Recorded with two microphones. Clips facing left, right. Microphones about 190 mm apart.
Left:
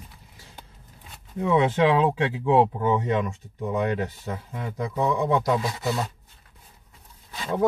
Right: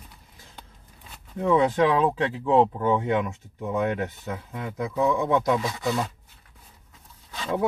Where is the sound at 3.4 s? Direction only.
Centre (ahead or behind).